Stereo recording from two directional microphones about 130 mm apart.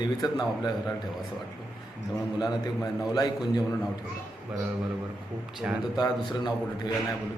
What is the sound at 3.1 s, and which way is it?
Speech, 30° left (ahead or behind).